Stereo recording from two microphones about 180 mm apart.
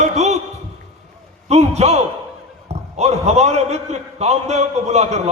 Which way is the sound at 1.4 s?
35° right (ahead or behind).